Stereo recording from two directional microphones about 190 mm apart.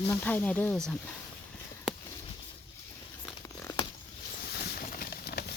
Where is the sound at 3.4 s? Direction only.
15° left (ahead or behind).